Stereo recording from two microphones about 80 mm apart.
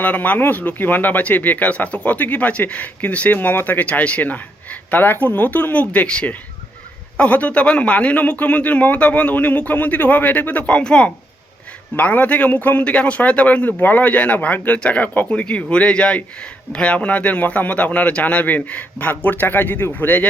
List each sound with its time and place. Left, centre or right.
0.0 s a man's voice: centre